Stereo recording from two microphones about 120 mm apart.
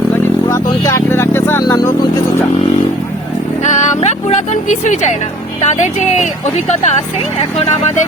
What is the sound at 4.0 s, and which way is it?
Speech, 70° left (ahead or behind).